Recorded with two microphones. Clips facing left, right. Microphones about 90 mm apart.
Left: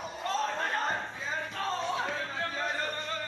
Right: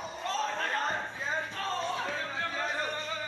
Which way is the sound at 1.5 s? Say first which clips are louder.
Left 1 dB; 15° left (ahead or behind).